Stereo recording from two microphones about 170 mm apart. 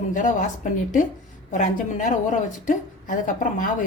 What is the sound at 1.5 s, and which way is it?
Speech, 45° left (ahead or behind).